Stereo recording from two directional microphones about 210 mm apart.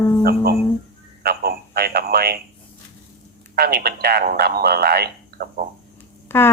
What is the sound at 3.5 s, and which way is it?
Speech, 45° right (ahead or behind).